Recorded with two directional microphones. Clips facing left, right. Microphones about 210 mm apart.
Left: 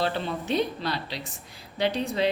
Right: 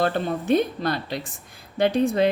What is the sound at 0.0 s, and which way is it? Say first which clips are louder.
A woman's voice: right 5 dB; 50° right (ahead or behind).